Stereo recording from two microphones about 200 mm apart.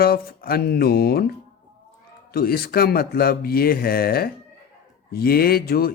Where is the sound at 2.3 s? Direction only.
50° left (ahead or behind).